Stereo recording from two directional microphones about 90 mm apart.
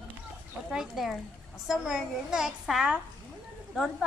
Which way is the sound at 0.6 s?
5° right (ahead or behind).